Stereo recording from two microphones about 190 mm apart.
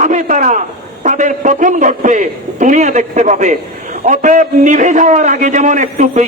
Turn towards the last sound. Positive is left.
turn(degrees=-40)  # may be behind; listen again after turning